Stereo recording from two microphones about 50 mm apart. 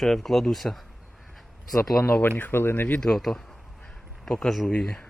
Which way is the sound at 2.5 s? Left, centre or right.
Left.